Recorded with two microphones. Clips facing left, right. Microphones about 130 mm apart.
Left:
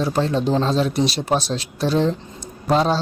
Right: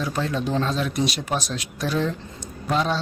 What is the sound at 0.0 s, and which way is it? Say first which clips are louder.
A man's voice: left 5 dB; 30° left (ahead or behind).